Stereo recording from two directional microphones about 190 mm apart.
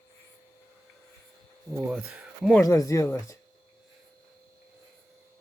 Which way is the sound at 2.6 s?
15° left (ahead or behind).